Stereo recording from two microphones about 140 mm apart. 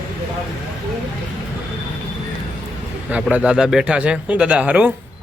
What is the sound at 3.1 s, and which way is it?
Speech, 10° right (ahead or behind).